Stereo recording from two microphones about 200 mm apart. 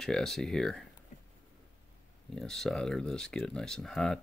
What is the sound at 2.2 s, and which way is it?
Speech, centre (ahead or behind).